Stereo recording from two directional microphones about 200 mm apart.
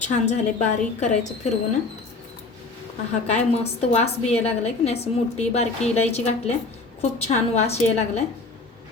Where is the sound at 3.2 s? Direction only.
30° left (ahead or behind).